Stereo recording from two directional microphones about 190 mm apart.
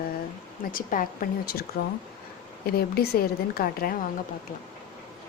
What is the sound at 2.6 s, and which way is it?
Speech, 55° left (ahead or behind).